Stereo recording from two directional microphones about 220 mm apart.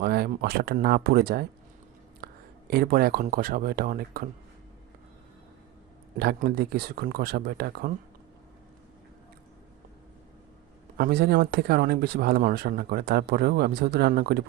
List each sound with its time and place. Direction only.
0.0 s speech: 45° right (ahead or behind)
6.1 s speech: 45° right (ahead or behind)
10.9 s speech: 45° right (ahead or behind)